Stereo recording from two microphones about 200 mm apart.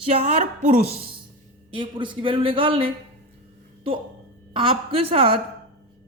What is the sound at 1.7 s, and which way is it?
A woman's voice, 25° right (ahead or behind).